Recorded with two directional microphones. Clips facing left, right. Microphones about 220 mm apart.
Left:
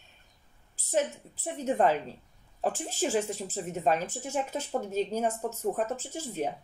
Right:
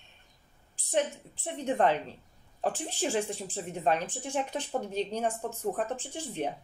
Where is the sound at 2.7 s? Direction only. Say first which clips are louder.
Left 2 dB; 45° left (ahead or behind).